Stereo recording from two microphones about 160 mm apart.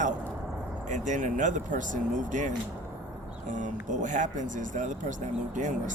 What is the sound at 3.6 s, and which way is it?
Speech, 50° right (ahead or behind).